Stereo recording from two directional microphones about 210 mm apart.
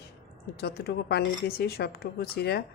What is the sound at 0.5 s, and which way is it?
Speech, 50° left (ahead or behind).